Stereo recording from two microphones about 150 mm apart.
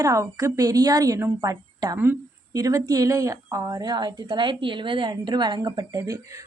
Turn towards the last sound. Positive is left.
turn(degrees=-20)  # may be behind; listen again after turning